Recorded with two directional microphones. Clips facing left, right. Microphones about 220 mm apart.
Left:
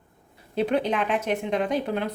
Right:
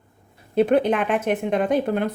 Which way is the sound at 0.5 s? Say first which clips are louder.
Right 6 dB; 50° right (ahead or behind).